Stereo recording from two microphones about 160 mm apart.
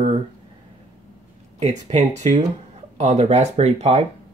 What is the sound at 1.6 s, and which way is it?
Speech, 45° right (ahead or behind).